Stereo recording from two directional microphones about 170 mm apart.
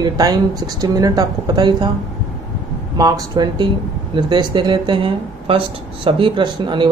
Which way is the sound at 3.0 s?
25° right (ahead or behind).